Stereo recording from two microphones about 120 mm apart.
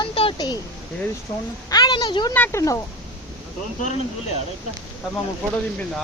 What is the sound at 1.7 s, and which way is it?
Speech, 35° left (ahead or behind).